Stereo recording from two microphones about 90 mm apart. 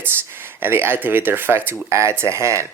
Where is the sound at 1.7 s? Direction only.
35° right (ahead or behind).